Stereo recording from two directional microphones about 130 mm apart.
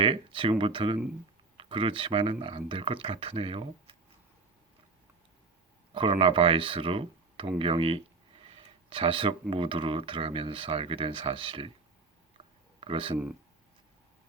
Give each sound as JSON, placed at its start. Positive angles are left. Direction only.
{"t": 0.0, "sound": "speech", "side_deg": -45}
{"t": 5.9, "sound": "speech", "side_deg": -45}
{"t": 12.8, "sound": "speech", "side_deg": -40}